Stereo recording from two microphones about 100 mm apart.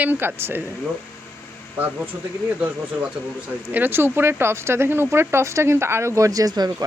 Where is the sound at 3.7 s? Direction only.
20° right (ahead or behind); by 6.8 s 40° right (ahead or behind).